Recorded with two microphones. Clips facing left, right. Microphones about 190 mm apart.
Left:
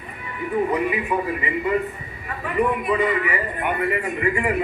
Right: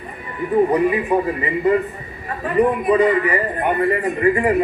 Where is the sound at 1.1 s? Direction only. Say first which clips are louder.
Right 5 dB; 40° right (ahead or behind).